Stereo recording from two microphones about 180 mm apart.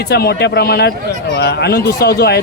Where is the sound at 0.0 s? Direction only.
65° left (ahead or behind).